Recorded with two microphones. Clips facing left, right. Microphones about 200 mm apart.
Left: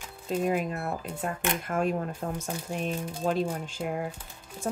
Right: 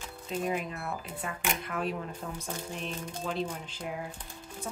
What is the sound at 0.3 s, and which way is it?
Speech, 50° left (ahead or behind).